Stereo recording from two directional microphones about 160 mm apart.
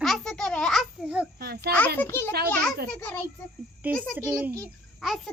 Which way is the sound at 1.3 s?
80° right.